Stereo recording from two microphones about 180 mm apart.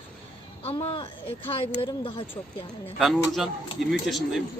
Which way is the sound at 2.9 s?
Centre (ahead or behind).